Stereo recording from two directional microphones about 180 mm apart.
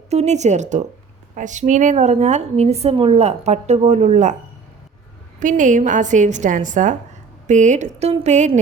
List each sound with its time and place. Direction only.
0.1 s a woman's voice: 40° right (ahead or behind)
5.4 s a woman's voice: 45° right (ahead or behind)